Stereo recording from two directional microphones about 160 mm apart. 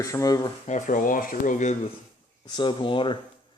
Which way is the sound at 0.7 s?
55° left (ahead or behind).